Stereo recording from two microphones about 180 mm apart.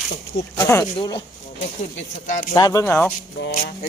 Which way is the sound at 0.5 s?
15° left (ahead or behind).